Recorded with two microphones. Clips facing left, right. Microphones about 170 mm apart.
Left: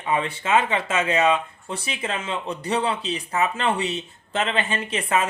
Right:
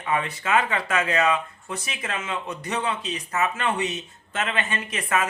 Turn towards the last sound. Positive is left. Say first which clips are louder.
# left 2 dB
turn(degrees=30)  # may be behind; listen again after turning